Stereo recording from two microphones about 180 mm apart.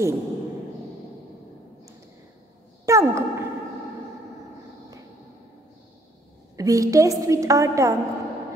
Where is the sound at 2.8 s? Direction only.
15° right (ahead or behind).